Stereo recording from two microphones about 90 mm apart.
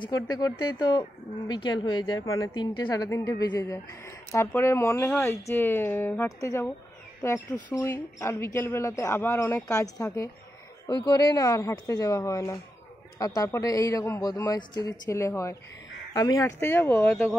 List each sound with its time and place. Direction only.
0.1 s speech: 45° left (ahead or behind)
2.2 s a woman's voice: 40° left (ahead or behind)
2.5 s speech: 60° left (ahead or behind)
2.9 s a woman's voice: 40° left (ahead or behind); by 6.2 s 25° left (ahead or behind)
6.2 s a woman's voice: 35° left (ahead or behind)
11.1 s a woman's voice: 40° left (ahead or behind)
15.0 s a woman's voice: 35° left (ahead or behind)
16.5 s speech: 25° left (ahead or behind)